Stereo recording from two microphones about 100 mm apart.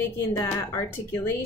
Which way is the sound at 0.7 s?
25° left (ahead or behind).